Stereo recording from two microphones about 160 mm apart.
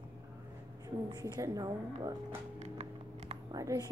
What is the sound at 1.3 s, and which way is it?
Speech, 25° right (ahead or behind).